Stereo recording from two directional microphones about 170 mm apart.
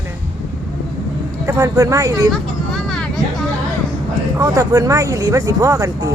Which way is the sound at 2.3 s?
5° left (ahead or behind).